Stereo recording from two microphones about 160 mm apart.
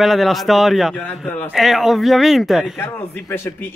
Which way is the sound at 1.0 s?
10° left (ahead or behind).